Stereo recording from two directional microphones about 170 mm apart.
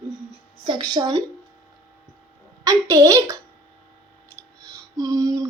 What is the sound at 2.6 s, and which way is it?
Speech, 20° right (ahead or behind).